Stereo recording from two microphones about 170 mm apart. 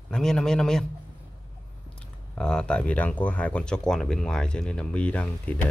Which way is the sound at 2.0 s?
5° left (ahead or behind).